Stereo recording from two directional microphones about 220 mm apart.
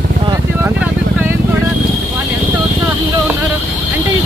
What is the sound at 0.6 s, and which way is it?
Vehicle, 10° right (ahead or behind).